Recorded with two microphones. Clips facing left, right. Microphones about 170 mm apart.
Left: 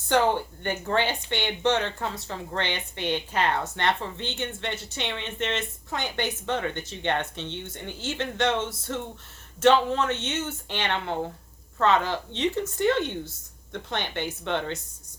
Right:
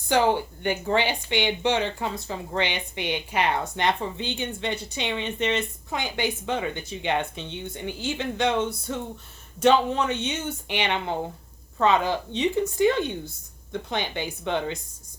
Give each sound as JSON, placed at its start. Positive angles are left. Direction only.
{"t": 0.6, "sound": "speech", "side_deg": -10}